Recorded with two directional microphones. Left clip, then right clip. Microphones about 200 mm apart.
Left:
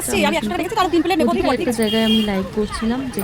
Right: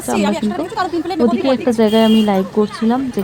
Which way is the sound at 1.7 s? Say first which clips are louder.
Right 5 dB; 10° right (ahead or behind).